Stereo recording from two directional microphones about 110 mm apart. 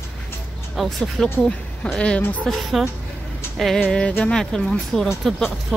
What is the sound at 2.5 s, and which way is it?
Speech, centre (ahead or behind).